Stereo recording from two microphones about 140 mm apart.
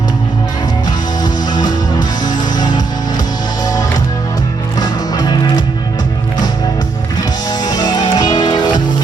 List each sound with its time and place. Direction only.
1.2 s music: 30° left (ahead or behind)
4.8 s music: 30° left (ahead or behind)
7.6 s music: 30° left (ahead or behind)